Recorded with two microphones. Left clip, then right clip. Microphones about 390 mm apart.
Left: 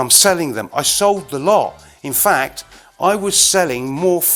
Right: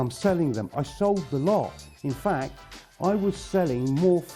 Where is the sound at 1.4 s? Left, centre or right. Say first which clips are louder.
Left 13 dB; centre.